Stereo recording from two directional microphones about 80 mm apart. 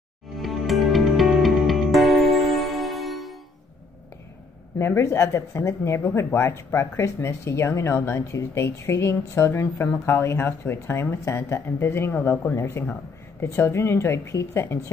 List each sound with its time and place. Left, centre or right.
0.4 s music: centre
4.7 s speech: left
9.6 s speech: left